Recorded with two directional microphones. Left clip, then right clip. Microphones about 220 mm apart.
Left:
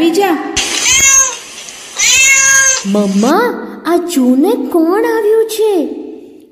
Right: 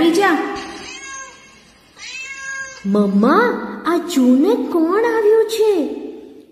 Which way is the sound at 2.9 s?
30° left (ahead or behind).